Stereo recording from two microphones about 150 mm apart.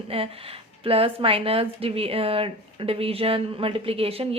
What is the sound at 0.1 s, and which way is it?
A woman's voice, 40° right (ahead or behind).